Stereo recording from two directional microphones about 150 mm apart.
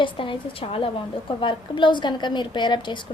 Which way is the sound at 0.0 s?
35° left (ahead or behind).